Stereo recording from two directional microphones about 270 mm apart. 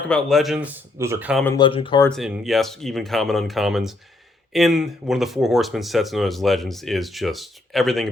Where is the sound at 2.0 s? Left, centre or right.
Centre.